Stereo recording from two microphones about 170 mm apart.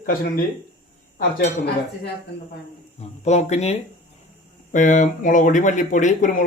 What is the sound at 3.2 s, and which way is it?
Speech, 40° left (ahead or behind).